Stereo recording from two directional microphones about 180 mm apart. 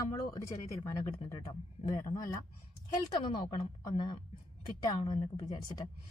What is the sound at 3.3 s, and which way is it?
A woman's voice, 25° left (ahead or behind).